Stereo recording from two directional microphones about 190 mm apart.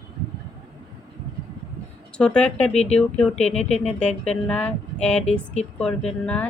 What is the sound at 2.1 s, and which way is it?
A woman's voice, 5° left (ahead or behind).